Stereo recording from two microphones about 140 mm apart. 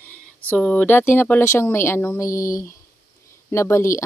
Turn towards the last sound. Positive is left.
turn(degrees=20)  # may be behind; listen again after turning